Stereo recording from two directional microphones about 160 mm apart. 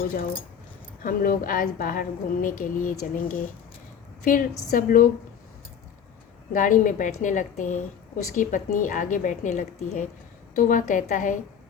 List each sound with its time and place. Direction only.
0.0 s a woman's voice: 65° left (ahead or behind)
4.2 s a woman's voice: 60° left (ahead or behind)
6.5 s a woman's voice: 55° left (ahead or behind)
10.5 s a woman's voice: 60° left (ahead or behind)